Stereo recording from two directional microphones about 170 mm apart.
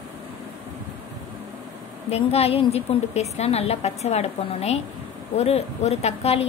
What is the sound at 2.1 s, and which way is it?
A woman's voice, 35° left (ahead or behind).